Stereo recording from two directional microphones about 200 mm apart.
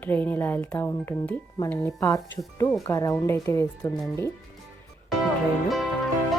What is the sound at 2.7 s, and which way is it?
Speech, 5° left (ahead or behind).